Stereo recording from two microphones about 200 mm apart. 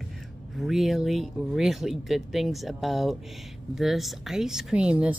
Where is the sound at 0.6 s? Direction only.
Centre (ahead or behind).